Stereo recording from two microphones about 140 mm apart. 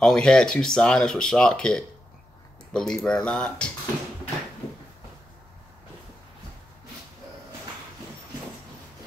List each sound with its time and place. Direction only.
0.0 s speech: 5° left (ahead or behind)